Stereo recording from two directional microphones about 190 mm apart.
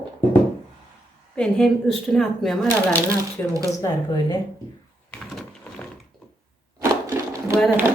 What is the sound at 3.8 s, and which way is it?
Speech, 20° left (ahead or behind).